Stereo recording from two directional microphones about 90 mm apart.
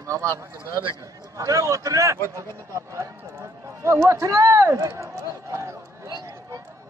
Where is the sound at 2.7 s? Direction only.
30° right (ahead or behind).